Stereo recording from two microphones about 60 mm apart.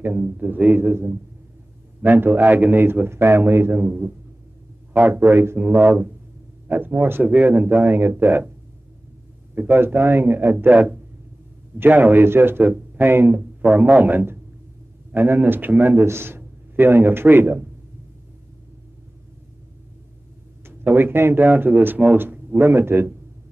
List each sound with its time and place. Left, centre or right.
0.0 s a man's voice: right
5.3 s a man's voice: right
5.6 s a man's voice: right
9.6 s a man's voice: right
10.7 s speech: right
11.8 s a man's voice: right
13.4 s a man's voice: right
20.6 s a man's voice: right
22.6 s a man's voice: right